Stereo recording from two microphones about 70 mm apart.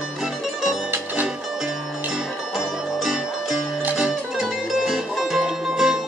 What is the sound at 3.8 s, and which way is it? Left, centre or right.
Music, centre.